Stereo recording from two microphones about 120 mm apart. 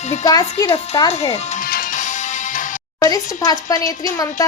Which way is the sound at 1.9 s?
90° left.